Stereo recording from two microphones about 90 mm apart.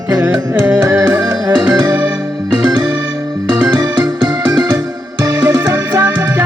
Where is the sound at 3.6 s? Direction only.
45° right (ahead or behind).